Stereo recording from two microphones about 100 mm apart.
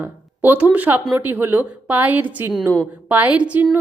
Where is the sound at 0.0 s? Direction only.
15° right (ahead or behind).